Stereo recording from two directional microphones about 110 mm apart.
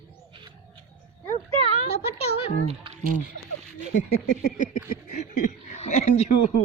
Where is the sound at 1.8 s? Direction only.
65° left (ahead or behind).